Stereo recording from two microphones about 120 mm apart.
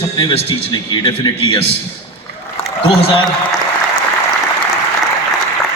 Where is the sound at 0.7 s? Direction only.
40° left (ahead or behind).